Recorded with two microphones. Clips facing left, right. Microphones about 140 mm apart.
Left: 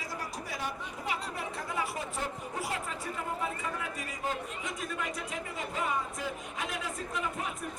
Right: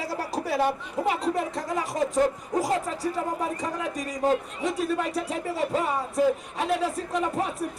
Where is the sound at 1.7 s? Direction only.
40° right (ahead or behind).